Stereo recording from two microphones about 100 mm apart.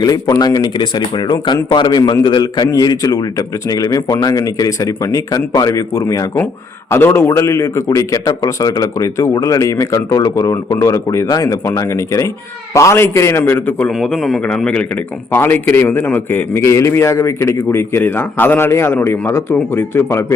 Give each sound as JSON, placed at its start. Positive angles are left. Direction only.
{"t": 0.0, "sound": "a man's voice", "side_deg": 40}
{"t": 13.9, "sound": "a man's voice", "side_deg": 0}
{"t": 15.3, "sound": "a man's voice", "side_deg": 20}